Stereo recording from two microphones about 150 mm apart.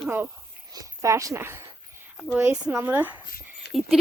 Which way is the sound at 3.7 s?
Centre (ahead or behind).